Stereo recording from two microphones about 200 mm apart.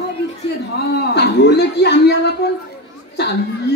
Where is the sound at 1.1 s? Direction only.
55° left (ahead or behind).